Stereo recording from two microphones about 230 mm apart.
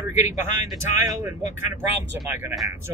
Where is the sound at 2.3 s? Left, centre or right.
Centre.